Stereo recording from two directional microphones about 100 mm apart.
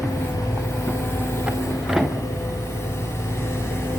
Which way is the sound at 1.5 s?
5° right (ahead or behind).